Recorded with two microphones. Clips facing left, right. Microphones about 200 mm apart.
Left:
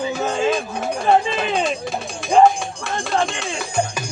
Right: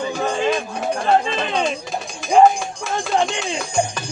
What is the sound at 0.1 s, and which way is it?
Music, 5° left (ahead or behind).